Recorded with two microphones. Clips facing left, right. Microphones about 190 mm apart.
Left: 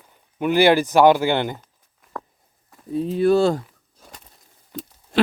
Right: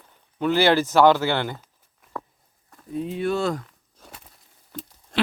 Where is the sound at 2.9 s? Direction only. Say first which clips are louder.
Left 7 dB; 35° left (ahead or behind).